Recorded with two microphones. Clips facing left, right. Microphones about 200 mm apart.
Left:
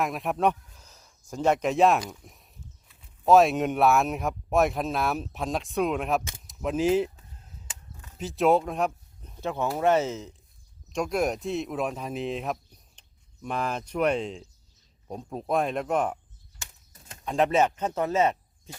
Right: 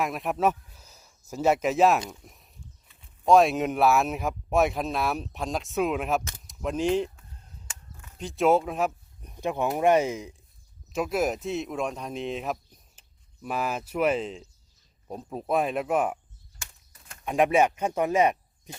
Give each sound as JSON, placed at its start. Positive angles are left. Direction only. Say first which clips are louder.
{"t": 0.0, "sound": "speech", "louder": "even", "side_deg": 0}
{"t": 6.5, "sound": "a sound", "louder": "left 2 dB", "side_deg": 0}
{"t": 8.2, "sound": "speech", "louder": "even", "side_deg": 0}
{"t": 9.2, "sound": "speech", "louder": "right 2 dB", "side_deg": -15}
{"t": 16.9, "sound": "a sound", "louder": "left 2 dB", "side_deg": 25}
{"t": 17.2, "sound": "speech", "louder": "right 1 dB", "side_deg": -10}